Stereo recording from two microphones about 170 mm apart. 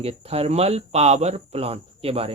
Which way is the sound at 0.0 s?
35° right (ahead or behind).